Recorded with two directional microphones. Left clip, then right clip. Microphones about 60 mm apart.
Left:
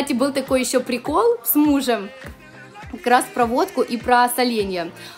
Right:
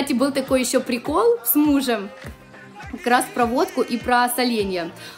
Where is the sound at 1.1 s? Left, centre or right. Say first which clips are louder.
Even; left.